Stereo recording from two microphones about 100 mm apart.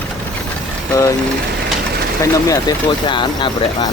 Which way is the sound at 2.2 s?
35° left (ahead or behind).